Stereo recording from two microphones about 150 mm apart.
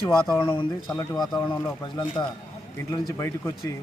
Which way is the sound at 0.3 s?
35° left (ahead or behind).